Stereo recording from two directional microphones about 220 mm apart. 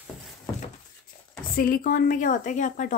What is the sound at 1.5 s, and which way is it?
Speech, 40° left (ahead or behind).